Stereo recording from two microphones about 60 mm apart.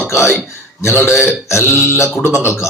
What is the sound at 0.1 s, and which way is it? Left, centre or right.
A man's voice, left.